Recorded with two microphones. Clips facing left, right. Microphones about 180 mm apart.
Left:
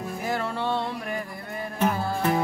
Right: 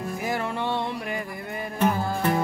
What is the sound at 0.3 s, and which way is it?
Music, 15° right (ahead or behind).